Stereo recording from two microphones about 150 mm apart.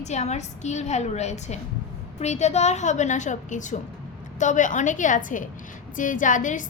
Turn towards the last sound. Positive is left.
turn(degrees=60)  # may be behind; listen again after turning